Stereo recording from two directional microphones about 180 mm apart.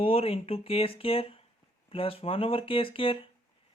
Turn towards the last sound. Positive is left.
turn(degrees=30)  # may be behind; listen again after turning